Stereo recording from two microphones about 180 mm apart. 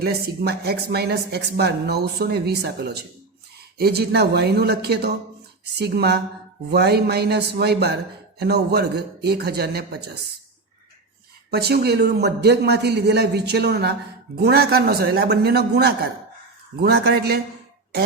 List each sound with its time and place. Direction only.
0.0 s speech: 60° right (ahead or behind)
11.5 s speech: 60° right (ahead or behind)